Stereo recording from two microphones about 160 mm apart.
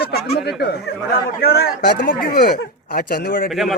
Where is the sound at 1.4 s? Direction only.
75° left (ahead or behind).